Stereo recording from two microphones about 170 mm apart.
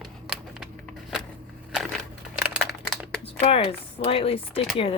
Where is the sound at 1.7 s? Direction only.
Centre (ahead or behind).